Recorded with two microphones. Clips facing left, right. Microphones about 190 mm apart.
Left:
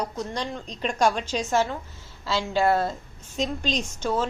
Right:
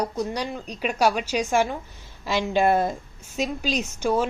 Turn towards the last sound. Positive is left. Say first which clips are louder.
# right 3 dB
turn(degrees=-10)  # may be behind; listen again after turning